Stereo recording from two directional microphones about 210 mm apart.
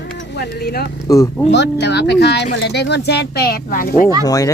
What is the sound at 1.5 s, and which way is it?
Speech, 55° left (ahead or behind).